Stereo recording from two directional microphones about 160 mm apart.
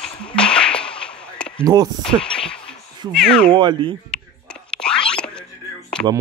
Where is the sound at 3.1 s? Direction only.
5° left (ahead or behind).